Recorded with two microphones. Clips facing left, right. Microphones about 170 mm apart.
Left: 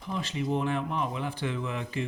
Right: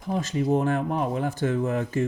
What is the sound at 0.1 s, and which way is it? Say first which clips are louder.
Speech: right 6 dB; 45° right (ahead or behind).